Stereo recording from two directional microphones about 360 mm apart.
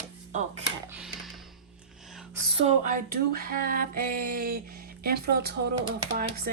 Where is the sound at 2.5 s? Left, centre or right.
Centre.